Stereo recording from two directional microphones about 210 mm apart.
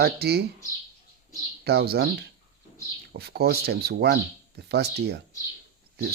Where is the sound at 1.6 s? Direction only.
50° right (ahead or behind).